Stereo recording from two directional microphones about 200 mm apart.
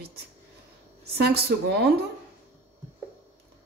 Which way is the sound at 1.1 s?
55° right (ahead or behind).